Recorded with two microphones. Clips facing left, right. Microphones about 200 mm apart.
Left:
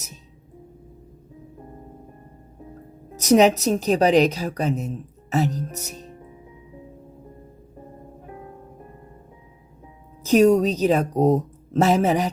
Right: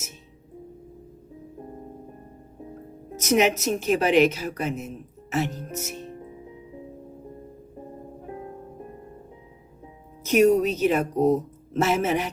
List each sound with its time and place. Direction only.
3.2 s a woman's voice: 35° left (ahead or behind)
5.8 s music: 35° left (ahead or behind)
10.2 s a woman's voice: 35° left (ahead or behind)